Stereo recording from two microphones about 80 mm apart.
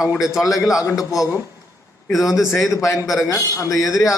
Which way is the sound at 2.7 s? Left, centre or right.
Left.